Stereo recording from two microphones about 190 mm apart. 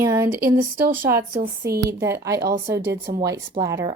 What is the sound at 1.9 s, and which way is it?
Speech, 15° right (ahead or behind).